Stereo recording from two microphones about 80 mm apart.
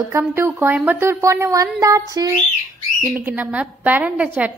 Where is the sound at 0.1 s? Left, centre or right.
Right.